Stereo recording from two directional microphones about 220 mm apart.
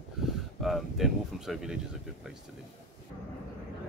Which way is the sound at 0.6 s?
Centre (ahead or behind).